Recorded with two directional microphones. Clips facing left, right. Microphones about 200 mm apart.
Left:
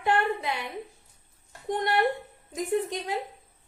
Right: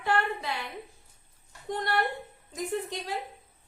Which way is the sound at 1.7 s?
20° left (ahead or behind).